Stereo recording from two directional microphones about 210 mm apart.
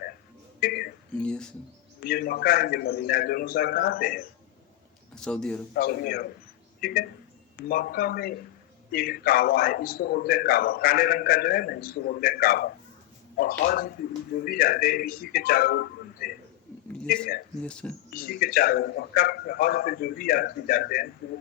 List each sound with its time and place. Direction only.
0.6 s a sound: 45° left (ahead or behind)
1.1 s speech: 5° left (ahead or behind)
2.0 s a man's voice: 45° left (ahead or behind)
5.1 s a man's voice: 5° left (ahead or behind)
5.7 s a man's voice: 45° left (ahead or behind)
7.7 s a man's voice: 45° left (ahead or behind)
17.6 s a man's voice: 5° left (ahead or behind)
18.1 s a man's voice: 45° left (ahead or behind)